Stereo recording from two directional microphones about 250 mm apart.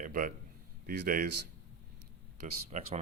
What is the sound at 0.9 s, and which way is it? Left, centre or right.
Speech, right.